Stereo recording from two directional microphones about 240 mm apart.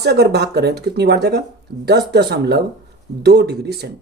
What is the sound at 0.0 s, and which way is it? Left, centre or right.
Speech, right.